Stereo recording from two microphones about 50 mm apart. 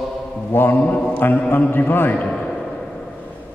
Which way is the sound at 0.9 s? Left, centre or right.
Left.